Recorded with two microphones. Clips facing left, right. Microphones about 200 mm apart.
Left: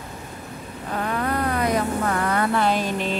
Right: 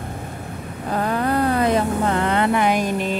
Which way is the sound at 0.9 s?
35° right (ahead or behind).